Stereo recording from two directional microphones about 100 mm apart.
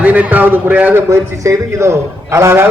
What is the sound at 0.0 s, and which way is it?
A man's voice, 15° right (ahead or behind).